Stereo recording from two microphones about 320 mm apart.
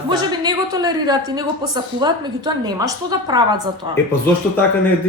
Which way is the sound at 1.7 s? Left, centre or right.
Centre.